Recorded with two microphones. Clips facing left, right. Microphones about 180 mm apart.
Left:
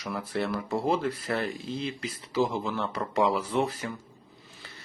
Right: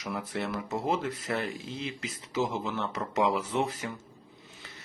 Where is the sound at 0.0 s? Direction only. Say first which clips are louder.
Left 3 dB; 20° right (ahead or behind).